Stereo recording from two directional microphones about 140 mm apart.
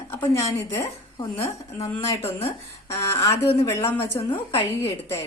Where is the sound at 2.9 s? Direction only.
20° left (ahead or behind).